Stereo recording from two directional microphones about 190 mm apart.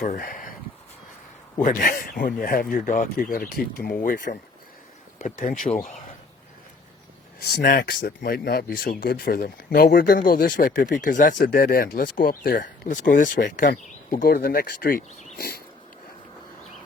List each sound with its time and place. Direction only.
0.0 s speech: 45° left (ahead or behind)
1.6 s speech: 45° left (ahead or behind)
7.4 s speech: 55° left (ahead or behind)